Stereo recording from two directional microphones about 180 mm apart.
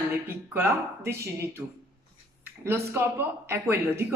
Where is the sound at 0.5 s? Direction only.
10° right (ahead or behind).